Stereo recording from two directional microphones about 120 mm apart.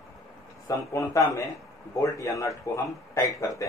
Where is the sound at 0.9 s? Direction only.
25° left (ahead or behind).